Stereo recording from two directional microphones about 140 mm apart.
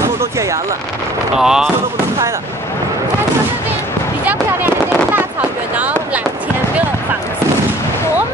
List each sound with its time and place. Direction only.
0.2 s speech: 20° right (ahead or behind)
1.4 s speech: 5° right (ahead or behind)
4.3 s a sound: 15° right (ahead or behind)
5.8 s speech: 10° right (ahead or behind)